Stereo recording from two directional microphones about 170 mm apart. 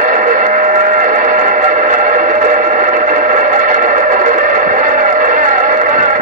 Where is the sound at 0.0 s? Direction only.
50° right (ahead or behind).